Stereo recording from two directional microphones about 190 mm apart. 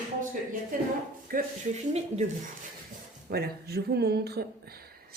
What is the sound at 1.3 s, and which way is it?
Speech, 50° right (ahead or behind).